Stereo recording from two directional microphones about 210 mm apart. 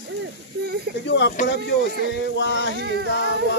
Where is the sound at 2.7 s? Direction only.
50° right (ahead or behind).